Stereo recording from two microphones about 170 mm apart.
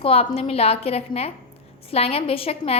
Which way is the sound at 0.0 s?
35° left (ahead or behind).